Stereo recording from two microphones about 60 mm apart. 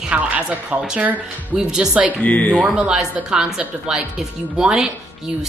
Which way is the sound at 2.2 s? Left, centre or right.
Left.